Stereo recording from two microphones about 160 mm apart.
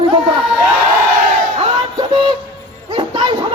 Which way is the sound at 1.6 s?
30° right (ahead or behind).